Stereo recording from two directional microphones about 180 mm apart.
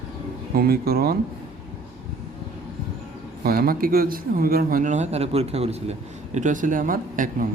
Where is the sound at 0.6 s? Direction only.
60° right (ahead or behind).